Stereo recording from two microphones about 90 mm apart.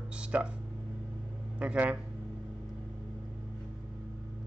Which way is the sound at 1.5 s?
15° right (ahead or behind).